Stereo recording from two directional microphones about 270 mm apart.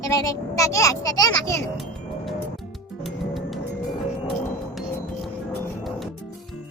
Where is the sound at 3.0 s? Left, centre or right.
Centre.